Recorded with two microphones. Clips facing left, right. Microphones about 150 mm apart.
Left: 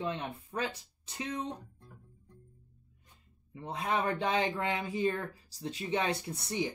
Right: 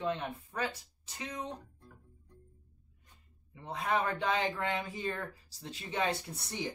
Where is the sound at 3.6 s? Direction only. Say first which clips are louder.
Left 1 dB; 20° left (ahead or behind).